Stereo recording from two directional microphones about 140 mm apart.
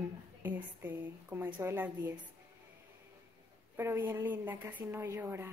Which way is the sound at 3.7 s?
15° right (ahead or behind).